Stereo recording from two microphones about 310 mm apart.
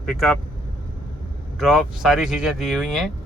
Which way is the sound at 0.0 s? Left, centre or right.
Centre.